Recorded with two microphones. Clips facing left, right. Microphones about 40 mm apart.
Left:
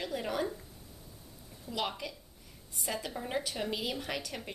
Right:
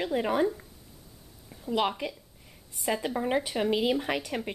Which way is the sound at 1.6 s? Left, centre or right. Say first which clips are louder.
Right 8 dB; right.